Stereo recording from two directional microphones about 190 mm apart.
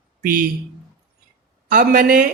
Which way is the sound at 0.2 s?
50° right (ahead or behind).